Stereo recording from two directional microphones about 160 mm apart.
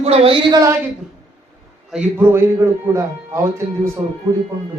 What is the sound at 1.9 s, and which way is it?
A man's voice, 15° right (ahead or behind).